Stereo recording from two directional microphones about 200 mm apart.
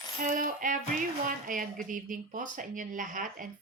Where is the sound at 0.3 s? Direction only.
40° right (ahead or behind).